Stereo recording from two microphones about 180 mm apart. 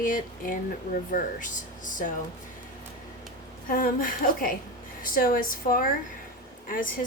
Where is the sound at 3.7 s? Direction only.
50° left (ahead or behind).